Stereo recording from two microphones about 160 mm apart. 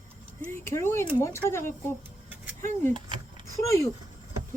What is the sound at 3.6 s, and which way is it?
Speech, 20° left (ahead or behind).